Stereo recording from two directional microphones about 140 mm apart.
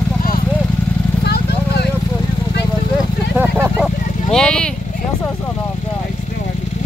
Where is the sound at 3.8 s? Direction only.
5° left (ahead or behind).